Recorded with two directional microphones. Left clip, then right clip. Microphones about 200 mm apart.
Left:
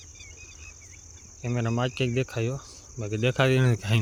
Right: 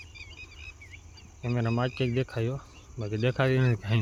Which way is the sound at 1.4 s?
5° left (ahead or behind).